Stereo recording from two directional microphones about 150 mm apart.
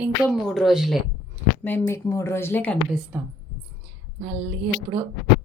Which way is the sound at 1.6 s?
10° left (ahead or behind).